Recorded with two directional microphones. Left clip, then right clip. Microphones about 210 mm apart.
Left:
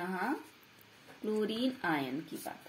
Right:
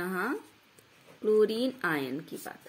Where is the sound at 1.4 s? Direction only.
55° right (ahead or behind).